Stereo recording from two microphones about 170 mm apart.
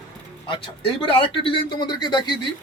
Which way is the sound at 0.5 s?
35° left (ahead or behind).